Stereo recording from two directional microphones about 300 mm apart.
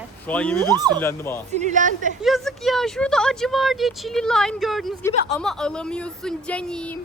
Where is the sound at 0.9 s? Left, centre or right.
Centre.